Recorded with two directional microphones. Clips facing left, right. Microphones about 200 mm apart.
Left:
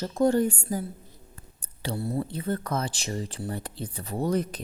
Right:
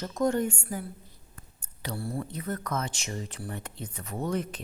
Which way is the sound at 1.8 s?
25° left (ahead or behind).